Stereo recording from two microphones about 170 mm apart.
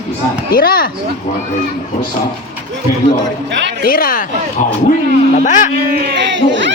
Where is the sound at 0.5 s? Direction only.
60° left (ahead or behind).